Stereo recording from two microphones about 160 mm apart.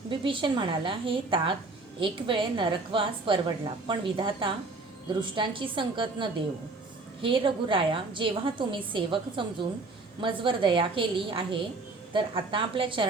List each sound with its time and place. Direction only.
0.1 s a woman's voice: 30° right (ahead or behind)